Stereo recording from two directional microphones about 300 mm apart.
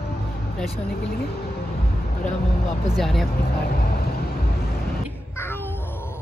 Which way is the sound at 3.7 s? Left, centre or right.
Left.